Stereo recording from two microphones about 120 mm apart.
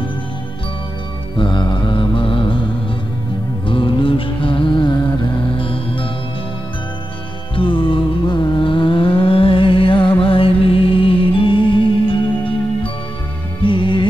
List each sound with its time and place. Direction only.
1.3 s mantra: 40° left (ahead or behind)
3.6 s music: 45° left (ahead or behind)
7.5 s music: 45° left (ahead or behind)
13.6 s music: 45° left (ahead or behind)